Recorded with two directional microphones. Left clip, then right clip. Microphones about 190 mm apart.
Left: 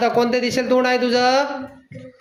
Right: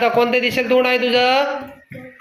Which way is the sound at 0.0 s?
25° left (ahead or behind).